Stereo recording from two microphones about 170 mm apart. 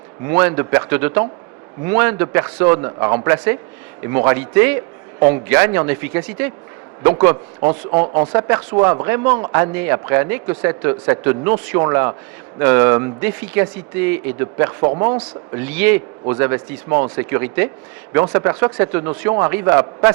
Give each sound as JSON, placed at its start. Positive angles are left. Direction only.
{"t": 0.3, "sound": "a man's voice", "side_deg": -15}
{"t": 15.5, "sound": "a man's voice", "side_deg": -10}